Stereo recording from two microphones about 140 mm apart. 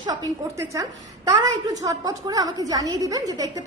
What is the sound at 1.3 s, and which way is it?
A woman's voice, 25° right (ahead or behind).